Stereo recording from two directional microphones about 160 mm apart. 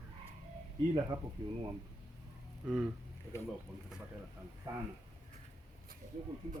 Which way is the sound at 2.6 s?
5° right (ahead or behind).